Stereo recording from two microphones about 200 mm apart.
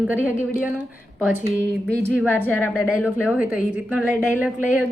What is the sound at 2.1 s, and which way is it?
Speech, 10° left (ahead or behind).